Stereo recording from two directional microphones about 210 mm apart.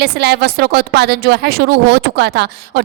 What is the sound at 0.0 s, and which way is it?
Speech, 50° right (ahead or behind).